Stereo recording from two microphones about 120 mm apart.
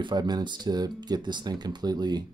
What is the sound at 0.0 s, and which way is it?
Speech, 35° right (ahead or behind).